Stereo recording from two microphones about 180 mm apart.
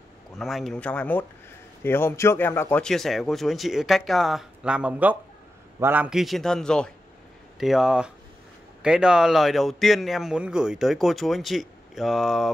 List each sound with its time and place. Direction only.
0.4 s a man's voice: centre (ahead or behind)